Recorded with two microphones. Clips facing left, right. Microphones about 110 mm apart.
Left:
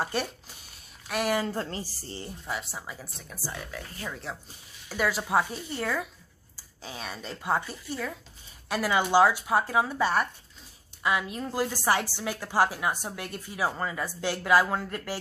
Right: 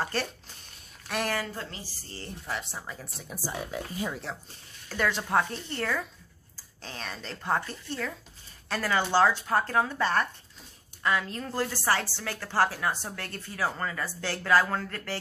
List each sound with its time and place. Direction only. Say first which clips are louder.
0.0 s speech: left 1 dB; 10° left (ahead or behind)
1.5 s a woman's voice: left 6 dB; 40° left (ahead or behind)
2.2 s speech: right 1 dB; 5° left (ahead or behind)
3.3 s speech: right 4 dB; 15° right (ahead or behind)
4.8 s a woman's voice: left 1 dB; 10° left (ahead or behind)